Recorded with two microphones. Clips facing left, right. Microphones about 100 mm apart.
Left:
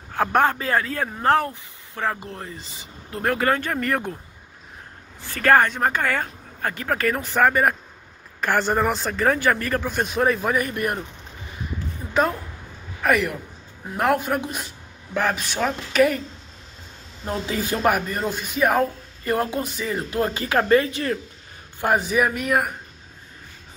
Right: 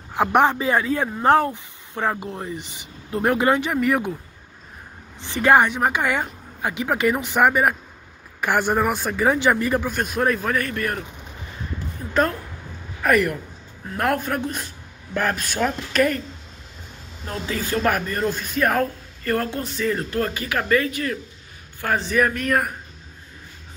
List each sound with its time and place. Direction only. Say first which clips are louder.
0.1 s a woman's voice: right 2 dB; 15° right (ahead or behind)
5.2 s a woman's voice: right 1 dB; 20° right (ahead or behind)
9.8 s speech: left 1 dB; centre (ahead or behind); by 11.1 s 20° left (ahead or behind)
12.1 s speech: even; 5° left (ahead or behind)
17.3 s speech: left 1 dB; 20° left (ahead or behind); by 18.9 s 5° left (ahead or behind)
19.2 s speech: left 1 dB; 15° left (ahead or behind)
21.8 s speech: left 1 dB; 10° left (ahead or behind)